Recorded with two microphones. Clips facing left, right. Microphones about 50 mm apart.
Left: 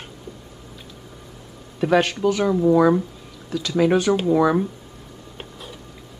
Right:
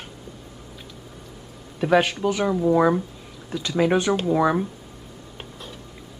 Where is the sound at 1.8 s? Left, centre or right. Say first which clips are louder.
Left 1 dB; centre.